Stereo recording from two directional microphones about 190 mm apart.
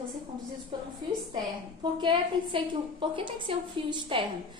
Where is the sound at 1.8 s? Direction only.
25° right (ahead or behind).